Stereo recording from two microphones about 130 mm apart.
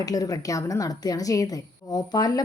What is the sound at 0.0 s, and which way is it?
A woman's voice, 30° left (ahead or behind).